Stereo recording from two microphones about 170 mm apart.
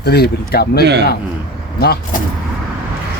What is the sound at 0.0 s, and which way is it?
Speech, 70° left (ahead or behind).